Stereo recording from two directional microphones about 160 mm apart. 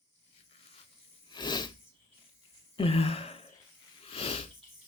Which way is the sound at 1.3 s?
25° left (ahead or behind).